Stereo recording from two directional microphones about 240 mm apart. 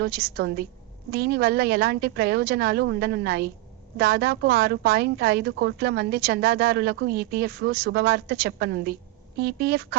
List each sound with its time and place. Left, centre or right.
0.0 s a woman's voice: right